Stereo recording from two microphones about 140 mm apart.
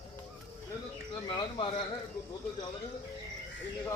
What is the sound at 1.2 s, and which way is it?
Speech, 35° left (ahead or behind).